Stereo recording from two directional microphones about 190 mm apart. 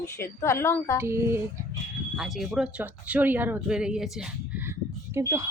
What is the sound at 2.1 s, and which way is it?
Speech, centre (ahead or behind).